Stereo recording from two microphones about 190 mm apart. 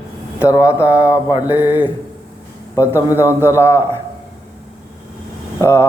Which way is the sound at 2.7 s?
15° left (ahead or behind).